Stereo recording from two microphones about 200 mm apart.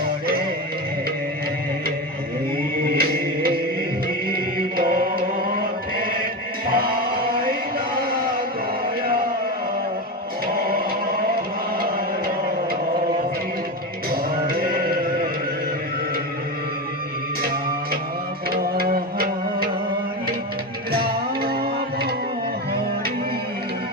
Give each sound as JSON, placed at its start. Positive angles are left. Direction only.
{"t": 2.9, "sound": "music", "side_deg": -50}
{"t": 4.3, "sound": "chant", "side_deg": -45}
{"t": 6.7, "sound": "music", "side_deg": -50}
{"t": 7.9, "sound": "a sound", "side_deg": -45}
{"t": 10.4, "sound": "choir", "side_deg": -45}
{"t": 14.1, "sound": "music", "side_deg": -50}
{"t": 18.5, "sound": "music", "side_deg": -50}
{"t": 20.9, "sound": "music", "side_deg": -50}